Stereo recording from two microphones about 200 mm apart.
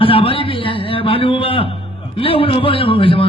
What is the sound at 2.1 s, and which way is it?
A man's voice, 25° left (ahead or behind).